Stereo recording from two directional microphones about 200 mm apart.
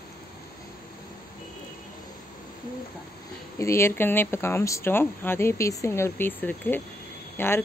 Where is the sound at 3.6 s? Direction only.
15° left (ahead or behind).